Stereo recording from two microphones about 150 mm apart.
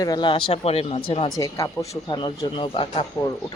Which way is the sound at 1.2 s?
20° left (ahead or behind).